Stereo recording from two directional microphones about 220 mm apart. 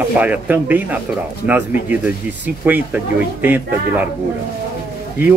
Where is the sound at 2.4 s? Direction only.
10° right (ahead or behind).